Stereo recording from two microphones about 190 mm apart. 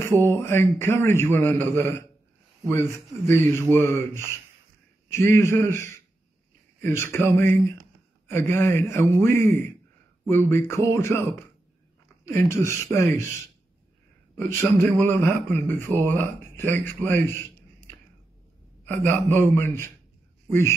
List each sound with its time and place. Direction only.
0.2 s a man's voice: 10° left (ahead or behind)
3.3 s a man's voice: 15° left (ahead or behind)
5.1 s a man's voice: 15° left (ahead or behind)
12.3 s a man's voice: 15° left (ahead or behind)